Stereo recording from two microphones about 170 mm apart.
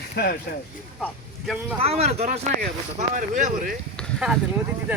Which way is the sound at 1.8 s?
35° right (ahead or behind).